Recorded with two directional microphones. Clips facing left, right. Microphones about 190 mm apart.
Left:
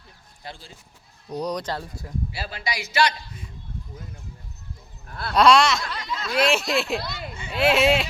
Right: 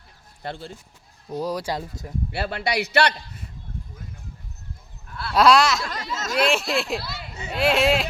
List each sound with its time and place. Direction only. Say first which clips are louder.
0.4 s a man's voice: right 7 dB; 60° right (ahead or behind)
1.3 s speech: right 1 dB; 5° right (ahead or behind)
2.3 s a man's voice: right 7 dB; 60° right (ahead or behind)
5.0 s a sound: left 1 dB; 45° left (ahead or behind)
5.3 s speech: even; centre (ahead or behind)
5.8 s speech: right 2 dB; 40° right (ahead or behind)
6.3 s speech: even; centre (ahead or behind)